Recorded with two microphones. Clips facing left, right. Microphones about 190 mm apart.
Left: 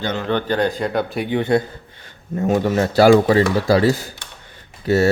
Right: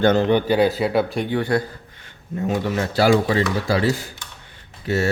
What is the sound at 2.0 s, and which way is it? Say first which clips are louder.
Speech: left 4 dB; 45° left (ahead or behind).